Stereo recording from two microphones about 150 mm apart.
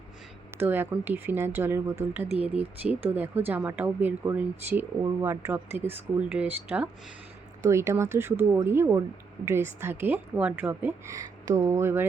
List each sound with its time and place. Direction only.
0.5 s a woman's voice: 15° right (ahead or behind)